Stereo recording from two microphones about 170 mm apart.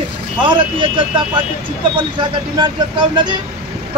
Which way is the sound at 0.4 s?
30° right (ahead or behind).